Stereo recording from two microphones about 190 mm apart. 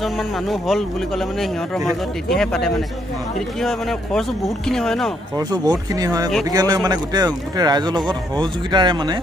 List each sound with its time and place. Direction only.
0.0 s speech: centre (ahead or behind)
5.3 s speech: 20° right (ahead or behind)